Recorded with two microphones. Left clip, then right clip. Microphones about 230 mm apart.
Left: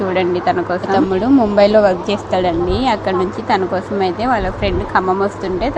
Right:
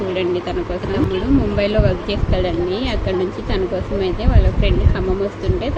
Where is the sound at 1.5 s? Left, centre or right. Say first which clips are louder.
Left 8 dB; left.